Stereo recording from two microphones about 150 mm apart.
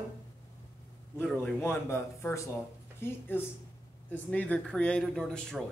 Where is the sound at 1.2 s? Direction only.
15° left (ahead or behind).